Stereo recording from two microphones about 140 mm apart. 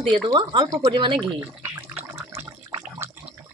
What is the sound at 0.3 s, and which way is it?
Speech, 35° right (ahead or behind).